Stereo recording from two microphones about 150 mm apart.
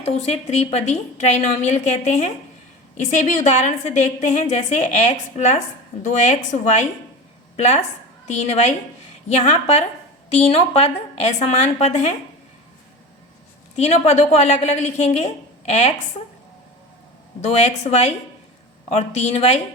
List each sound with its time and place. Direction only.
0.0 s a woman's voice: 45° left (ahead or behind)
13.7 s a woman's voice: 45° left (ahead or behind)
17.4 s a woman's voice: 50° left (ahead or behind)